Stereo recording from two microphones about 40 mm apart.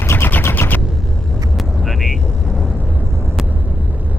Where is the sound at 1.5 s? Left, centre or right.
Centre.